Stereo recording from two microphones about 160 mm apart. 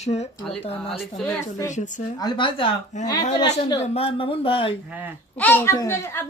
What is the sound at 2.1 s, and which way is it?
Speech, 25° left (ahead or behind).